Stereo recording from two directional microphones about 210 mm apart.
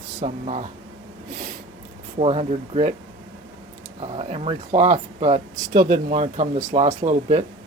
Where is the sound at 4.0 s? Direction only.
30° right (ahead or behind).